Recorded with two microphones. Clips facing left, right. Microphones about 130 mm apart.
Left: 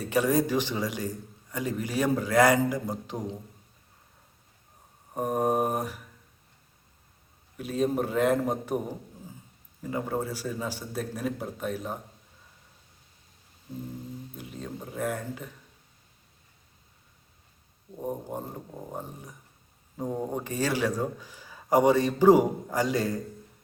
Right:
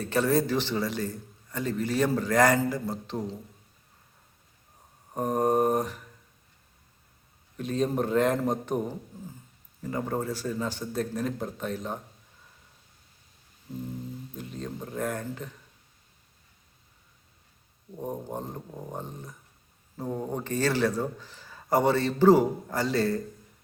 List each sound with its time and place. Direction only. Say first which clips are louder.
0.0 s a man's voice: even; 10° left (ahead or behind)
5.1 s a man's voice: right 1 dB; 5° left (ahead or behind)
7.5 s a man's voice: even; 5° left (ahead or behind)
9.8 s a man's voice: even; 5° left (ahead or behind)
14.3 s a sound: right 3 dB; 5° left (ahead or behind)
18.0 s a man's voice: even; 5° left (ahead or behind)